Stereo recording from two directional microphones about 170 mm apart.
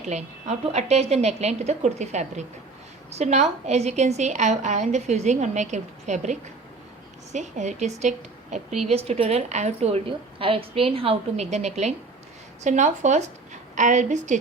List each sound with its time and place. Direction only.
0.0 s a woman's voice: 40° right (ahead or behind)
7.3 s a woman's voice: 45° right (ahead or behind)